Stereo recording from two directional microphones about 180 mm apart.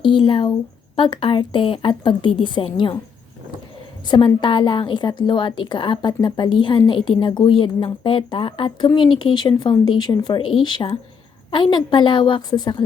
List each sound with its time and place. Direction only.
0.0 s a woman's voice: 25° left (ahead or behind)
4.0 s a woman's voice: 25° left (ahead or behind)